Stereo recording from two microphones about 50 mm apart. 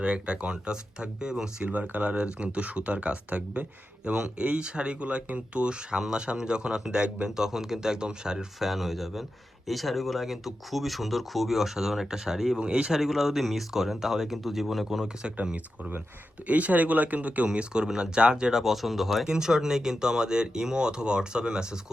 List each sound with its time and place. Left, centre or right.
0.0 s speech: right
1.7 s speech: right; by 8.4 s centre
8.5 s speech: centre
14.8 s speech: centre
16.5 s speech: right
18.6 s speech: centre